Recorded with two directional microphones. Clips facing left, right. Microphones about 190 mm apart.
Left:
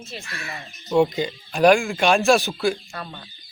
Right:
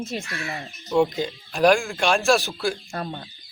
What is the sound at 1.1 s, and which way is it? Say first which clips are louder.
Speech: left 2 dB; centre (ahead or behind).